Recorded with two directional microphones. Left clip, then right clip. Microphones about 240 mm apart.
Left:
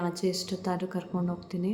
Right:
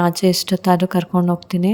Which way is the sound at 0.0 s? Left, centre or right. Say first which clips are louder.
Right 13 dB; right.